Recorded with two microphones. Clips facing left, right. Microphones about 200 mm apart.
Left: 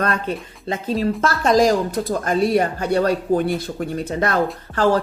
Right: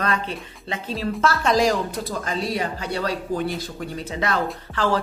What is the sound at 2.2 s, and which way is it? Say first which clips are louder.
Speech: left 8 dB; 55° left (ahead or behind).